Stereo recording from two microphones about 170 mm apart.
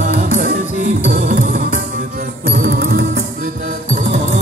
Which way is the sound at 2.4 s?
70° right (ahead or behind).